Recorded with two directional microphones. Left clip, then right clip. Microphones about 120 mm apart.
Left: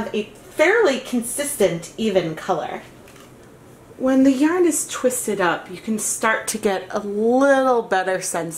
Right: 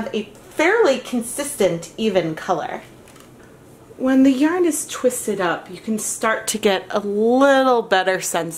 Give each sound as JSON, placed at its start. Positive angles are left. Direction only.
{"t": 0.1, "sound": "a woman's voice", "side_deg": -35}
{"t": 4.0, "sound": "a woman's voice", "side_deg": -25}